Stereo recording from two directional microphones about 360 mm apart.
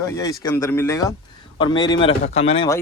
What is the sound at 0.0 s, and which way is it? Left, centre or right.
Speech, centre.